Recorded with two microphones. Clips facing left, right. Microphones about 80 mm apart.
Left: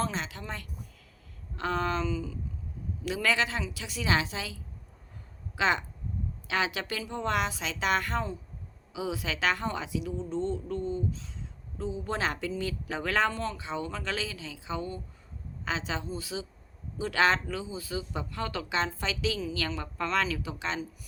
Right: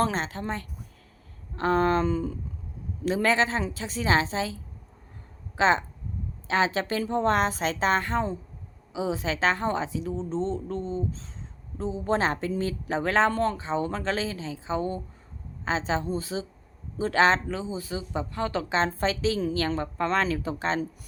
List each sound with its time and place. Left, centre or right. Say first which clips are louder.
0.0 s speech: right 6 dB; right
1.5 s a sound: right 7 dB; right
3.0 s speech: right 5 dB; right
7.9 s speech: right 2 dB; right
13.3 s speech: right 7 dB; right